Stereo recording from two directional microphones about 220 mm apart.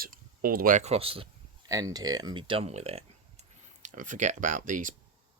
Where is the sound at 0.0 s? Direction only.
40° right (ahead or behind).